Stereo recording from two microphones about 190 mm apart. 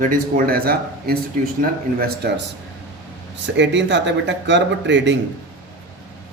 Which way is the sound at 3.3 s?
70° right (ahead or behind).